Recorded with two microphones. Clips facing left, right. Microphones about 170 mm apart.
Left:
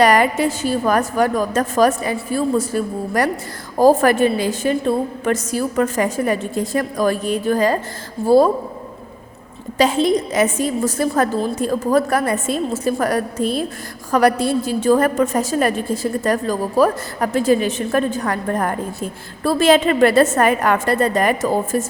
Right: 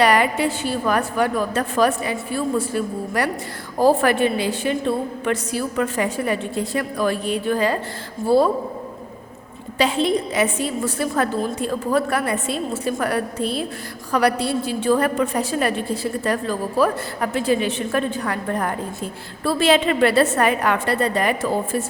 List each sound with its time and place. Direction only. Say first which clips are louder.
0.0 s a woman's voice: left 3 dB; 45° left (ahead or behind)
9.7 s a woman's voice: left 3 dB; 40° left (ahead or behind)